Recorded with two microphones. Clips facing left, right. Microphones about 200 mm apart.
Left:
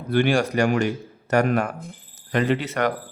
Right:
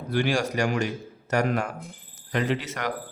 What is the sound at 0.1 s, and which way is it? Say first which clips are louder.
A man's voice: left 5 dB; 60° left (ahead or behind).